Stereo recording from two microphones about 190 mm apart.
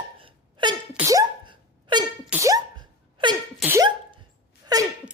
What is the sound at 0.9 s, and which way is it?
Sneeze, 15° right (ahead or behind).